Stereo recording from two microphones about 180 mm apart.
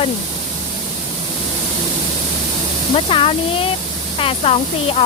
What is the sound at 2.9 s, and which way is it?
Speech, 30° left (ahead or behind).